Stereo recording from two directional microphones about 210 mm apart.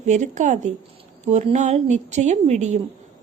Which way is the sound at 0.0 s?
35° right (ahead or behind).